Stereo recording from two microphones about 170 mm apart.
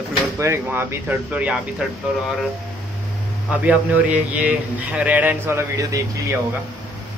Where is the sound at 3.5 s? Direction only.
10° right (ahead or behind).